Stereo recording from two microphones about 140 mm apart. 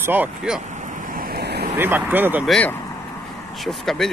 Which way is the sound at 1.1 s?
90° right.